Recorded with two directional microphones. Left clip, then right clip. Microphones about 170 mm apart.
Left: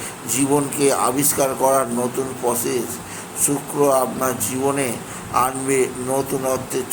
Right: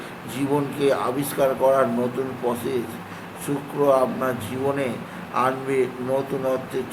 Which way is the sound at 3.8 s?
20° left (ahead or behind).